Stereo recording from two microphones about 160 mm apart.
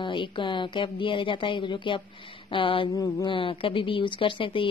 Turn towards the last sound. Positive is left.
turn(degrees=35)  # may be behind; listen again after turning